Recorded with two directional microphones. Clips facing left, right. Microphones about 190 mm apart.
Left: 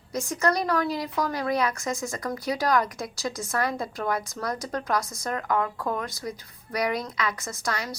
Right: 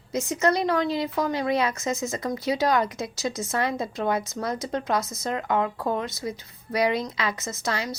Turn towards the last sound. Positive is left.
turn(degrees=-25)  # may be behind; listen again after turning